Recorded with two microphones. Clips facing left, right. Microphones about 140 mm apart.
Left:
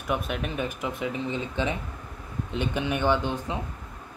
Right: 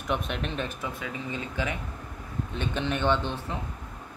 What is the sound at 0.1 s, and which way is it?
Speech, 5° left (ahead or behind).